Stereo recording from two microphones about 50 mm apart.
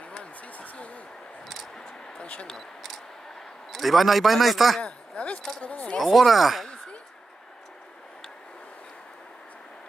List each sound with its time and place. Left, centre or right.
0.1 s a sound: left
2.4 s a man's voice: centre
4.8 s speech: left
5.9 s a man's voice: centre